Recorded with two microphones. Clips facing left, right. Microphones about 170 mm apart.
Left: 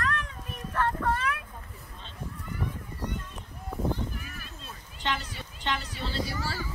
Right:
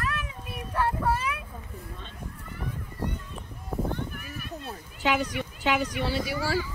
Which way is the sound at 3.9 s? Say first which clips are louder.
Even; 60° right (ahead or behind).